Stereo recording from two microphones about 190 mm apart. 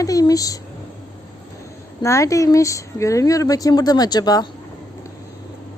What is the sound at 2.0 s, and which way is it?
Speech, 15° left (ahead or behind).